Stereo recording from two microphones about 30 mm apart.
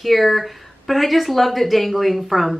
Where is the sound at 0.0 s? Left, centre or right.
Centre.